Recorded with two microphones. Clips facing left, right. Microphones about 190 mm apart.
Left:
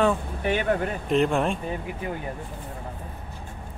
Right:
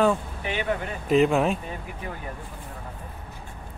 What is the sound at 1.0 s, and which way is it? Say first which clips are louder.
Speech: right 3 dB; centre (ahead or behind).